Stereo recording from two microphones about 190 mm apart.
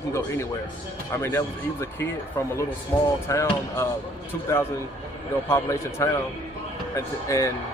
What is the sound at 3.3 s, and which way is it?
Speech, 15° left (ahead or behind).